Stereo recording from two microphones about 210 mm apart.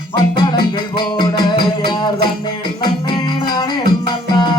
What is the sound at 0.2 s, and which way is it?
Music, 20° left (ahead or behind).